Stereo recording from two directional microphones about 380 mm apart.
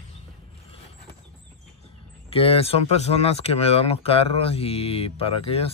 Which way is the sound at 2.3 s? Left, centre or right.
Centre.